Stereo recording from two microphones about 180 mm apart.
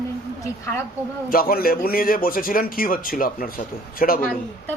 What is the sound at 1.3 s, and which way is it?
A man's voice, 50° left (ahead or behind).